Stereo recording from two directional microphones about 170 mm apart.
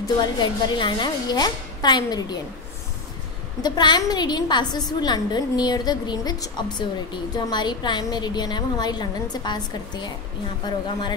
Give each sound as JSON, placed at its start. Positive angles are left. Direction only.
{"t": 0.2, "sound": "a woman's voice", "side_deg": 25}
{"t": 3.6, "sound": "a woman's voice", "side_deg": 25}